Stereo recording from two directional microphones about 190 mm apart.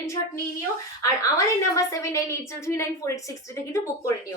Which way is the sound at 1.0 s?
15° left (ahead or behind).